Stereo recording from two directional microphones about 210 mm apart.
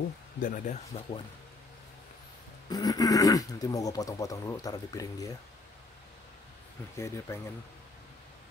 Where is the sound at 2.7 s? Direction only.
15° left (ahead or behind).